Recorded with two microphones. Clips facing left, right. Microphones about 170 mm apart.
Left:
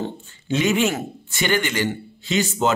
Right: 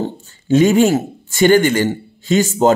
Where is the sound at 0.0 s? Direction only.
45° right (ahead or behind).